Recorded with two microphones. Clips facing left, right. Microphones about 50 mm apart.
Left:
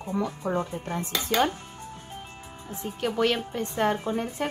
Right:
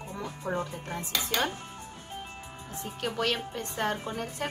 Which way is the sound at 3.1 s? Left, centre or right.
Left.